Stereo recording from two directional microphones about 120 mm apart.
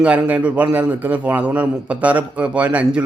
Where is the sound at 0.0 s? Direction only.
10° right (ahead or behind).